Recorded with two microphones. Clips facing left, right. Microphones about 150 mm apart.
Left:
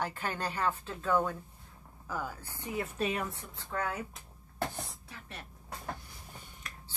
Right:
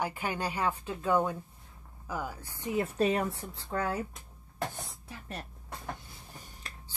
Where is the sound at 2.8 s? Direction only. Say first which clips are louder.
Right 6 dB; 35° right (ahead or behind).